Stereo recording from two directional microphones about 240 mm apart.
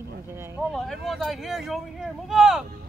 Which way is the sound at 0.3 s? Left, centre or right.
Centre.